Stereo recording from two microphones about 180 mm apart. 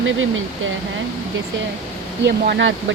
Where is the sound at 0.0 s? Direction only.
90° right.